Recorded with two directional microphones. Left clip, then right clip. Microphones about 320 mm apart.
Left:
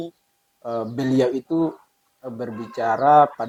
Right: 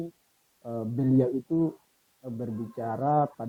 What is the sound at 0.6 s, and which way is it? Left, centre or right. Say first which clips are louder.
Speech: left 6 dB; centre.